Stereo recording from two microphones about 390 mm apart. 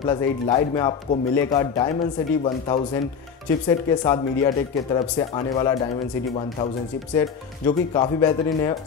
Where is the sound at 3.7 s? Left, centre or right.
Centre.